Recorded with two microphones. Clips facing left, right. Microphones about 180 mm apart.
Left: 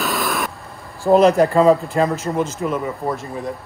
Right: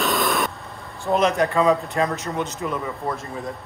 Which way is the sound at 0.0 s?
Centre (ahead or behind).